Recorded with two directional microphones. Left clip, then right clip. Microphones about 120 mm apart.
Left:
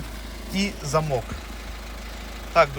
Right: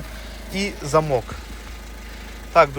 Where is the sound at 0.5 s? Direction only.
25° left (ahead or behind).